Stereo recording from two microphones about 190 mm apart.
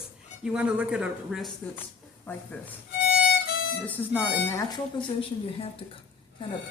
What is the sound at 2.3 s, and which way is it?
Speech, 10° left (ahead or behind).